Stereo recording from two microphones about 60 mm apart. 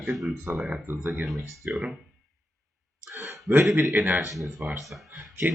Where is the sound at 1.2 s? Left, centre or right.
Centre.